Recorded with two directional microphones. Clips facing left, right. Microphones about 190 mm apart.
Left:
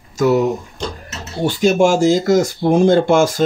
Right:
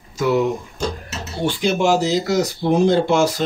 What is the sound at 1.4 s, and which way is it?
Speech, 45° left (ahead or behind).